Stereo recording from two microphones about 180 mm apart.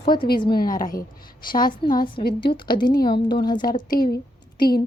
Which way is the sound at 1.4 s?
25° left (ahead or behind).